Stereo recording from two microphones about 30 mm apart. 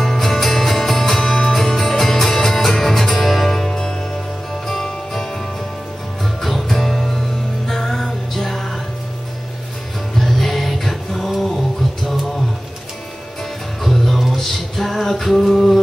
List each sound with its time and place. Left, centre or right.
0.0 s music: centre
3.5 s music: left
10.1 s music: centre
13.8 s music: centre